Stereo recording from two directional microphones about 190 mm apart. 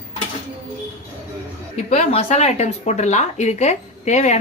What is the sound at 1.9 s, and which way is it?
Speech, 35° left (ahead or behind).